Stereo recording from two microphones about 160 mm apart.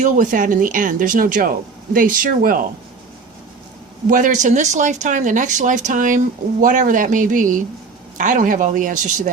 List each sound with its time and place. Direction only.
0.0 s speech: 55° right (ahead or behind)
4.1 s speech: 50° right (ahead or behind)